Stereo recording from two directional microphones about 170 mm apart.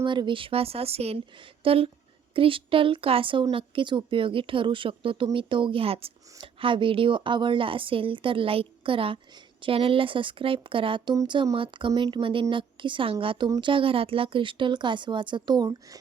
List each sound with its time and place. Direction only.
0.0 s speech: 30° right (ahead or behind)